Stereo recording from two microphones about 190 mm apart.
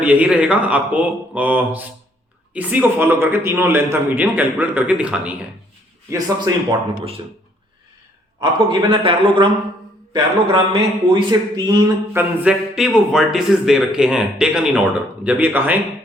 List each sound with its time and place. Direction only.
0.0 s a man's voice: 5° right (ahead or behind)
6.1 s a man's voice: 20° right (ahead or behind)
8.4 s a man's voice: 25° right (ahead or behind)
12.4 s a man's voice: 5° right (ahead or behind)